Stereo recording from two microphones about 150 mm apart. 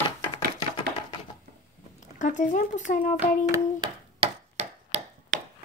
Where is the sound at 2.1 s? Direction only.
55° left (ahead or behind).